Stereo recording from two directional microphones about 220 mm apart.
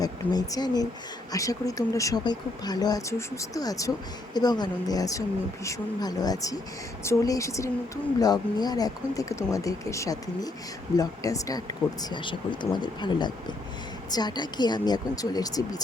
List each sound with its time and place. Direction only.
0.0 s speech: 15° left (ahead or behind)